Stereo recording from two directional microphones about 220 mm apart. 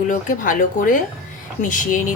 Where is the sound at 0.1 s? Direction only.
35° left (ahead or behind).